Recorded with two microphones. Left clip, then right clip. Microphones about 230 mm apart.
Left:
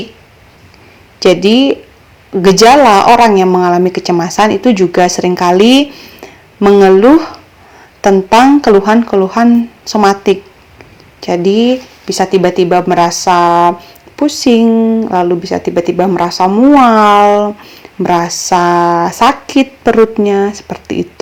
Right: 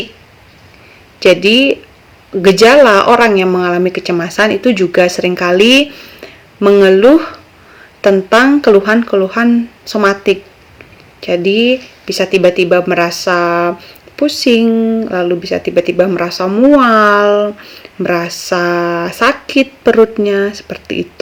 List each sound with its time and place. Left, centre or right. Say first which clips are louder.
1.2 s speech: even; centre
14.7 s speech: left 2 dB; left
15.2 s speech: left 2 dB; centre